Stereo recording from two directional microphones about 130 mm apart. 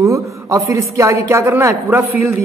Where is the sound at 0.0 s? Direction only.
25° right (ahead or behind).